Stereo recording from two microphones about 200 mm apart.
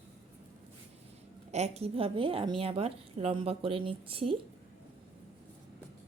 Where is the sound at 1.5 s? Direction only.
35° right (ahead or behind).